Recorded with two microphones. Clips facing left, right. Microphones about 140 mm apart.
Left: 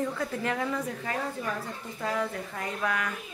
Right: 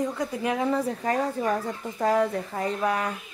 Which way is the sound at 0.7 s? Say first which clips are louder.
Right 7 dB; 40° right (ahead or behind).